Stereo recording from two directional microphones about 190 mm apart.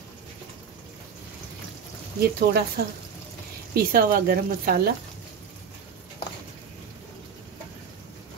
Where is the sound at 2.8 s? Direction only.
50° right (ahead or behind).